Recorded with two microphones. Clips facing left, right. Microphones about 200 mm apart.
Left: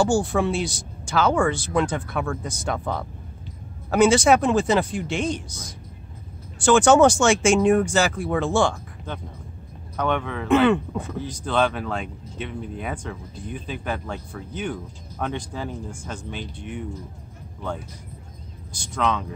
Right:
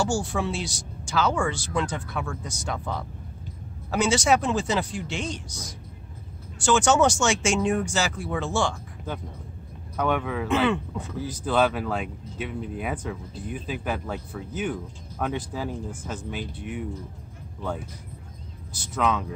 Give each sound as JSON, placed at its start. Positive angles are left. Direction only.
{"t": 0.0, "sound": "speech", "side_deg": 55}
{"t": 9.9, "sound": "speech", "side_deg": -5}
{"t": 10.5, "sound": "speech", "side_deg": 55}
{"t": 11.2, "sound": "speech", "side_deg": -5}
{"t": 18.7, "sound": "speech", "side_deg": -5}